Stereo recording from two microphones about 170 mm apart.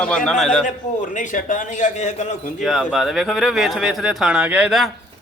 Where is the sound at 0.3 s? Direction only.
5° left (ahead or behind).